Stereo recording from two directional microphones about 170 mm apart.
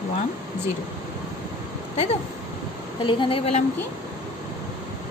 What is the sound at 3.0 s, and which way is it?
Speech, 30° left (ahead or behind).